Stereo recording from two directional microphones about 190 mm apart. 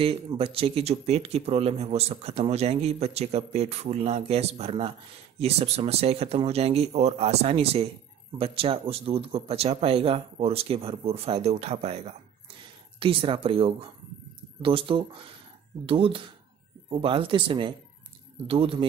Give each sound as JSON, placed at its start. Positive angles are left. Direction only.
{"t": 0.0, "sound": "speech", "side_deg": -30}